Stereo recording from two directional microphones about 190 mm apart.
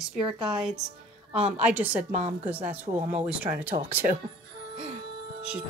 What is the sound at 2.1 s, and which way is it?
Speech, 35° right (ahead or behind).